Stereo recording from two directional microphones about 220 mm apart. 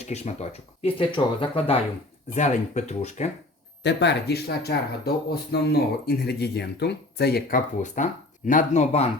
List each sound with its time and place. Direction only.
0.1 s speech: 30° left (ahead or behind)
3.8 s speech: 50° left (ahead or behind); by 9.0 s 30° left (ahead or behind)